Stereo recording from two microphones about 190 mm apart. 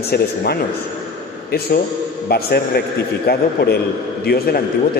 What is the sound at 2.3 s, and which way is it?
Speech, 55° left (ahead or behind).